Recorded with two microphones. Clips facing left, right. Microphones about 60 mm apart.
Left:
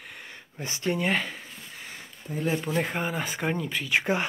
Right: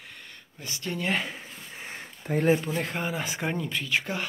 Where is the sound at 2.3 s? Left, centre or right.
Right.